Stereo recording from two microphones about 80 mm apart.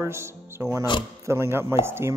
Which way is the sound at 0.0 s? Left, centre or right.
Right.